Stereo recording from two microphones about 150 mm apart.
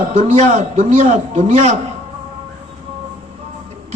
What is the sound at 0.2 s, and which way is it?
A man's voice, 55° right (ahead or behind).